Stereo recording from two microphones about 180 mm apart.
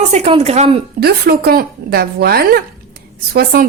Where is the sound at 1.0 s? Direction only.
60° right (ahead or behind).